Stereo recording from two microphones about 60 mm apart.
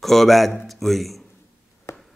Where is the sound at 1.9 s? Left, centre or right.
Left.